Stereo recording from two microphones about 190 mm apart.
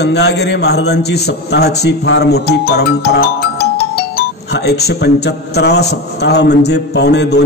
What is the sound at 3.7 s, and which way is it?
Speech, 60° left (ahead or behind).